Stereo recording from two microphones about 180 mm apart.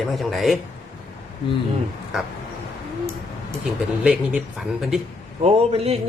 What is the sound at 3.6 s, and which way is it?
Speech, 5° right (ahead or behind).